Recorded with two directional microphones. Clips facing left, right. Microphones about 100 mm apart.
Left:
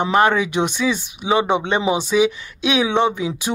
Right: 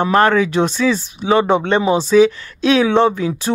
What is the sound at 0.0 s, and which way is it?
Speech, 15° left (ahead or behind).